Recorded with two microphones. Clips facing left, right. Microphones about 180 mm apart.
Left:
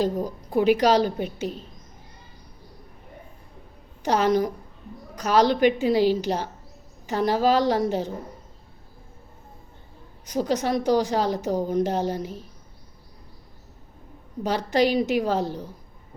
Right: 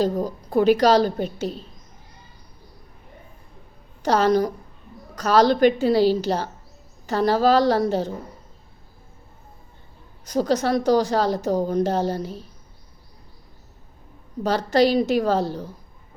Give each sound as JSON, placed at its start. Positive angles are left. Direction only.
{"t": 0.3, "sound": "a woman's voice", "side_deg": 15}
{"t": 4.0, "sound": "a woman's voice", "side_deg": 15}
{"t": 10.2, "sound": "a woman's voice", "side_deg": 15}
{"t": 14.4, "sound": "a woman's voice", "side_deg": 15}